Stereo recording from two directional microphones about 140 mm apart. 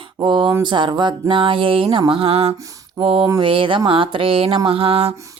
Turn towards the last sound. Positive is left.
turn(degrees=-45)  # may be behind; listen again after turning